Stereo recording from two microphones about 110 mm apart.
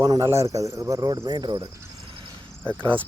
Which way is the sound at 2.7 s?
50° right (ahead or behind).